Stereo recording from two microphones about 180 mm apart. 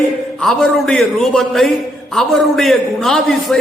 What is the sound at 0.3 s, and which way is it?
A man's voice, centre (ahead or behind).